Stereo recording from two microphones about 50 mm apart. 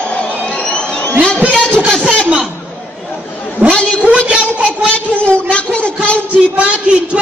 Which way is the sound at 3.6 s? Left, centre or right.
Right.